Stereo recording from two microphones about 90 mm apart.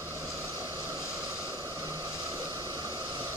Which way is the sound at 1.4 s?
40° right (ahead or behind).